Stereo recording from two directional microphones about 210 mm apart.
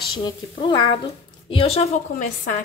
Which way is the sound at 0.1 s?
20° left (ahead or behind).